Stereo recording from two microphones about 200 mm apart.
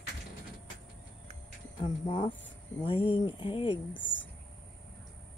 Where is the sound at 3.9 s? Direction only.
65° left (ahead or behind).